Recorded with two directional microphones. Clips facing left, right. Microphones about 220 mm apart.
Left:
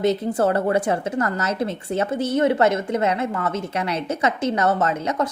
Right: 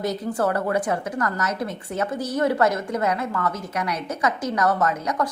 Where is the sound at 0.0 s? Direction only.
25° left (ahead or behind).